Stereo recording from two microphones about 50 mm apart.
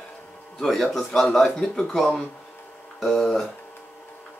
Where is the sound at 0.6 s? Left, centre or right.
Centre.